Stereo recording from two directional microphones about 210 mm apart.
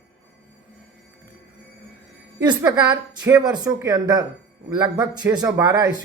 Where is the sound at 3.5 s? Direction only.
20° right (ahead or behind).